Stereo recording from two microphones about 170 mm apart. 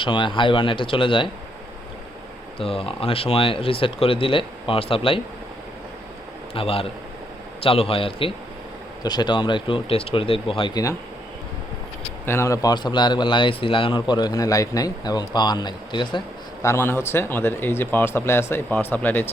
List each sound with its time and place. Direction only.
0.0 s a man's voice: 30° left (ahead or behind)
2.6 s speech: 35° left (ahead or behind)
6.5 s speech: 35° left (ahead or behind)
12.2 s a man's voice: 15° left (ahead or behind)
16.6 s speech: 15° left (ahead or behind)